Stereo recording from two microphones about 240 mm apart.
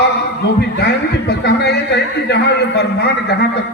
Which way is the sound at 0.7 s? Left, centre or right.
Left.